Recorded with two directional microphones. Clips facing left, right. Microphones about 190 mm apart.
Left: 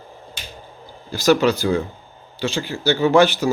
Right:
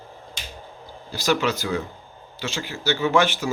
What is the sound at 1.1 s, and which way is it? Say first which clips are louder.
Speech: left 7 dB; 45° left (ahead or behind).